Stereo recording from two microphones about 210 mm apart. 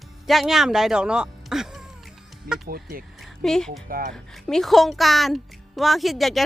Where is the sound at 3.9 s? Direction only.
45° right (ahead or behind).